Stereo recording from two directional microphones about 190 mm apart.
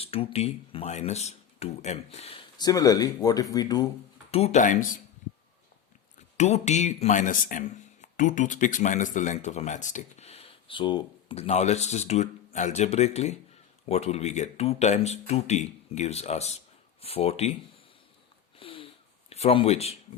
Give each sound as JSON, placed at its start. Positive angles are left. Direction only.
{"t": 0.0, "sound": "speech", "side_deg": 30}
{"t": 2.6, "sound": "speech", "side_deg": 20}
{"t": 4.3, "sound": "speech", "side_deg": 35}
{"t": 6.3, "sound": "speech", "side_deg": 35}
{"t": 18.6, "sound": "sniff", "side_deg": 25}
{"t": 19.3, "sound": "a man's voice", "side_deg": 30}